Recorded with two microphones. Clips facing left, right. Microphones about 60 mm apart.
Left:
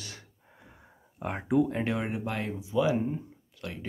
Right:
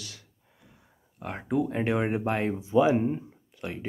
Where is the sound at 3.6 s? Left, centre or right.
Right.